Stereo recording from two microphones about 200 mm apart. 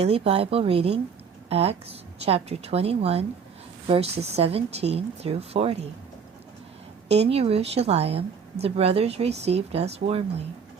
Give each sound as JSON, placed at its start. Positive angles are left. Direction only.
{"t": 0.0, "sound": "a woman's voice", "side_deg": -30}
{"t": 7.1, "sound": "speech", "side_deg": -30}